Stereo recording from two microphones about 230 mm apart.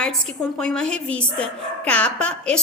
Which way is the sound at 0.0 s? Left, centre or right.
Centre.